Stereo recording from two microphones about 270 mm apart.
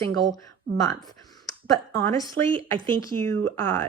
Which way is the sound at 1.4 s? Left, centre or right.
Centre.